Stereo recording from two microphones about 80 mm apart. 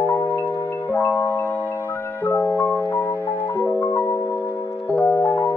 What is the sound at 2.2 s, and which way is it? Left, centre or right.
Music, left.